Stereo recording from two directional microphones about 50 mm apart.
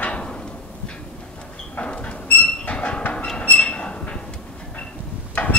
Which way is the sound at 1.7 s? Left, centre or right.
Left.